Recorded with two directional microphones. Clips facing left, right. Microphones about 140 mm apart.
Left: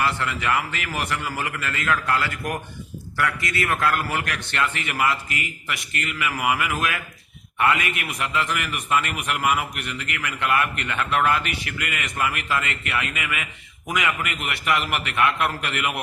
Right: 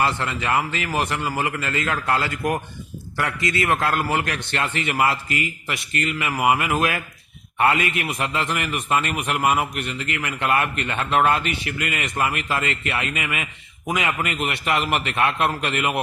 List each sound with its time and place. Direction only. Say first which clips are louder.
0.0 s a man's voice: right 1 dB; 25° right (ahead or behind)